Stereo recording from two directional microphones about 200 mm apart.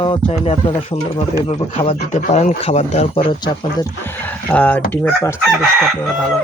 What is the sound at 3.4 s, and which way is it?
Speech, 20° left (ahead or behind).